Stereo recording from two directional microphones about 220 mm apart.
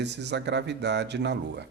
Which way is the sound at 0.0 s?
50° right (ahead or behind).